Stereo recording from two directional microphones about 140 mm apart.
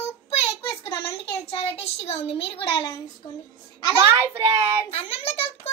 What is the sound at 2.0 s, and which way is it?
Speech, 45° left (ahead or behind).